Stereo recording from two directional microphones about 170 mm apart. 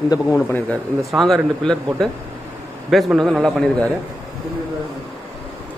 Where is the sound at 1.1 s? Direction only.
Centre (ahead or behind).